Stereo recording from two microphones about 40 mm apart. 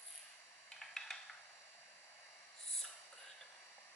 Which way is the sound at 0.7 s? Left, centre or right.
Centre.